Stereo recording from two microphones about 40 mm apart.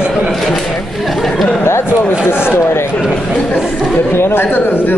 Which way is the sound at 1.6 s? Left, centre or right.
Left.